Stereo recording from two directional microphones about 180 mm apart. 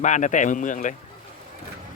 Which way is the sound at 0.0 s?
40° left (ahead or behind).